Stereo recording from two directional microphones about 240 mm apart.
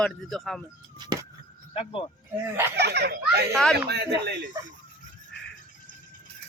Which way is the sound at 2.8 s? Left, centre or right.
Right.